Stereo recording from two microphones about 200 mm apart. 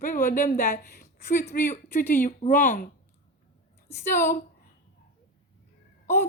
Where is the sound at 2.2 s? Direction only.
40° left (ahead or behind).